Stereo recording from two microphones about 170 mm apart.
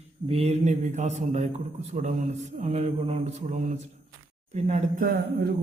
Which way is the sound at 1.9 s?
45° right (ahead or behind).